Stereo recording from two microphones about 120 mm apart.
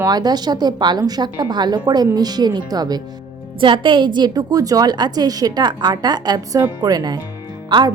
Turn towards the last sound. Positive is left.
turn(degrees=-40)  # may be behind; listen again after turning